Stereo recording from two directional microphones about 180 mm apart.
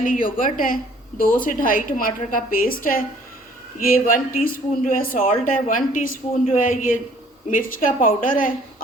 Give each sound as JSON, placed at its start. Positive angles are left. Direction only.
{"t": 0.0, "sound": "speech", "side_deg": 50}